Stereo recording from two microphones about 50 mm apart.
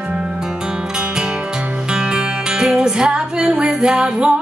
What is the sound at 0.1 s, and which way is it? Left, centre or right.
Music, centre.